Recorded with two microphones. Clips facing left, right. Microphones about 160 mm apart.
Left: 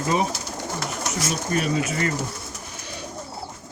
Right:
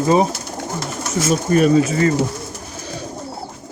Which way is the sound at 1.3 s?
45° right (ahead or behind).